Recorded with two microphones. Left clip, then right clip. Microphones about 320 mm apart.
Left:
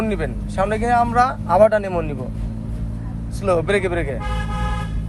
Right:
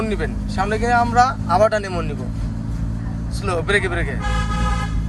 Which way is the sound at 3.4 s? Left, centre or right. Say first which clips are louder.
Left 1 dB; centre.